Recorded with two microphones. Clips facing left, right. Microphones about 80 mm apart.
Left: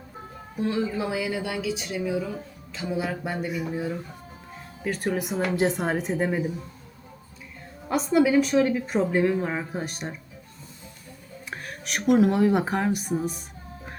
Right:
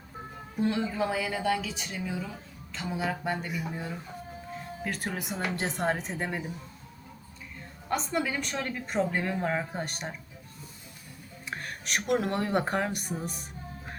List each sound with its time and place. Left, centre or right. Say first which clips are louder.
0.5 s a woman's voice: left 2 dB; centre
7.9 s a woman's voice: left 9 dB; centre
11.5 s a woman's voice: left 1 dB; centre